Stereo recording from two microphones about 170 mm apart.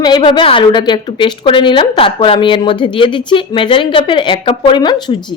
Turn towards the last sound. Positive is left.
turn(degrees=25)  # may be behind; listen again after turning